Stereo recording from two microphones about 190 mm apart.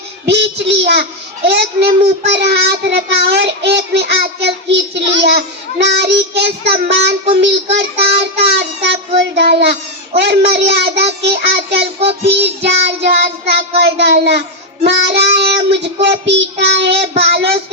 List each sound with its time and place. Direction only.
0.3 s child singing: 60° right (ahead or behind)